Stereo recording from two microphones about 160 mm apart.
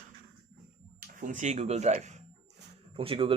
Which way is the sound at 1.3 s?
45° right (ahead or behind).